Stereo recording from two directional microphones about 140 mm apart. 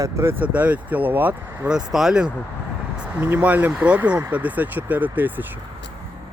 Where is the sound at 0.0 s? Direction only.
20° right (ahead or behind).